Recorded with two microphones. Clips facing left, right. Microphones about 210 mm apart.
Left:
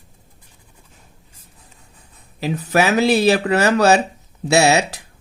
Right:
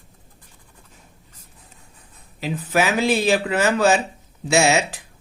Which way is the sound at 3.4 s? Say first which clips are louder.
Left 4 dB; 75° left (ahead or behind).